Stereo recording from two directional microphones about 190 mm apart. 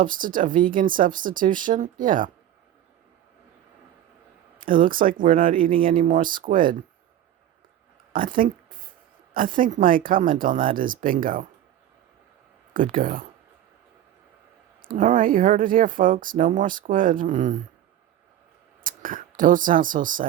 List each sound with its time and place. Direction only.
0.0 s speech: 45° right (ahead or behind)
4.5 s speech: 45° right (ahead or behind)
8.1 s speech: 45° right (ahead or behind)
12.7 s speech: 45° right (ahead or behind)
14.8 s speech: 45° right (ahead or behind)
18.8 s speech: 45° right (ahead or behind)